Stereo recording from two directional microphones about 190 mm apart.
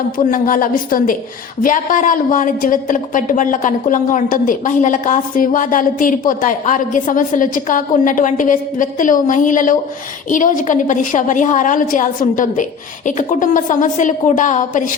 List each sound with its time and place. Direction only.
0.2 s a woman's voice: 45° left (ahead or behind)